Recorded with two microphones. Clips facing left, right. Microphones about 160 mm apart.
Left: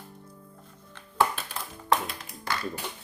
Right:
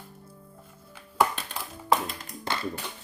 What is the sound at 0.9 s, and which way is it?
Music, 5° right (ahead or behind).